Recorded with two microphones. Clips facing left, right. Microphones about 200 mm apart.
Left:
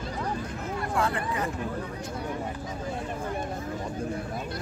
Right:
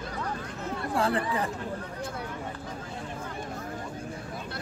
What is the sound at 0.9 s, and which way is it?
Speech, 30° right (ahead or behind).